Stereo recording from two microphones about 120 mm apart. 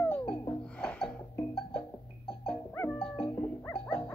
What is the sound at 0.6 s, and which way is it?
Music, 10° left (ahead or behind).